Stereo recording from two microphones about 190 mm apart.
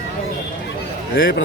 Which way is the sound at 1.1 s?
50° left (ahead or behind).